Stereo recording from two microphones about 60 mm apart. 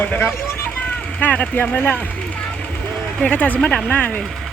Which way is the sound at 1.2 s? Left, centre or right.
Left.